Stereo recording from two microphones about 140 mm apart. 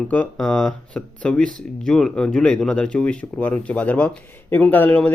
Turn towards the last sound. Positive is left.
turn(degrees=10)  # may be behind; listen again after turning